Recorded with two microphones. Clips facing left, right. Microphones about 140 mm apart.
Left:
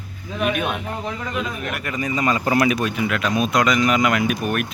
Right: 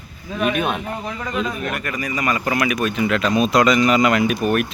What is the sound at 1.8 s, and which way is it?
Speech, 25° left (ahead or behind).